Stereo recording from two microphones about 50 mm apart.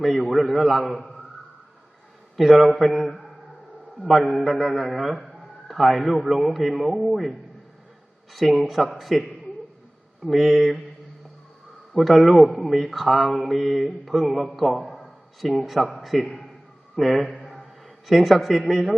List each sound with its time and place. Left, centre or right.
0.3 s a man's voice: centre
2.3 s a man's voice: centre
12.0 s a man's voice: centre
17.4 s a sound: centre